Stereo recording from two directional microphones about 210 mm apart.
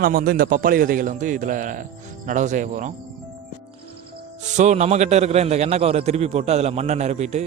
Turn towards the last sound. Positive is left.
turn(degrees=-30)  # may be behind; listen again after turning